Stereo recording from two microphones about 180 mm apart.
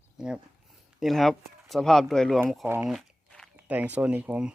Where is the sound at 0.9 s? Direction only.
Centre (ahead or behind).